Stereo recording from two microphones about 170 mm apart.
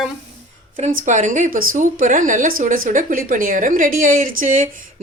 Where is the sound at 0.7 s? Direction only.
45° right (ahead or behind).